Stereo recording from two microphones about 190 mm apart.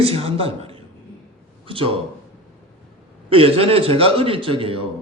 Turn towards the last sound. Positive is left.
turn(degrees=-30)  # may be behind; listen again after turning